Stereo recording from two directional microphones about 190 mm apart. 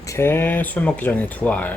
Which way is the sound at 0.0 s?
15° left (ahead or behind).